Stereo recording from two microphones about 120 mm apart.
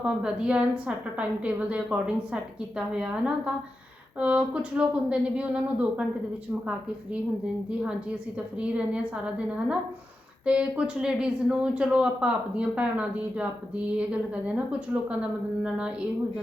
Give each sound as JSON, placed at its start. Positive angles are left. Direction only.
{"t": 0.0, "sound": "a woman's voice", "side_deg": -5}
{"t": 8.5, "sound": "a woman's voice", "side_deg": -10}